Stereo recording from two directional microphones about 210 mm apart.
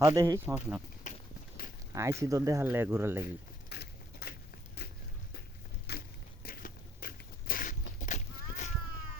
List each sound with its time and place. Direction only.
0.0 s speech: 15° right (ahead or behind)
1.1 s clip-clop: 35° left (ahead or behind)
1.9 s speech: 15° right (ahead or behind)
3.7 s a sound: 50° left (ahead or behind)
5.9 s a sound: 50° left (ahead or behind)
6.4 s biting: 45° left (ahead or behind)